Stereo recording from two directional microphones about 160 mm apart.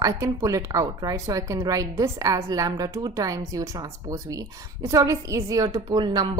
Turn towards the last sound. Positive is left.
turn(degrees=-25)  # may be behind; listen again after turning